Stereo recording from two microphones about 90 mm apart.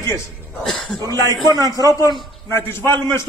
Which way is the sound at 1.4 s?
45° right (ahead or behind).